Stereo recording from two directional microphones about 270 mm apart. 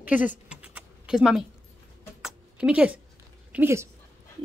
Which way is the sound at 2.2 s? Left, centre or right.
Centre.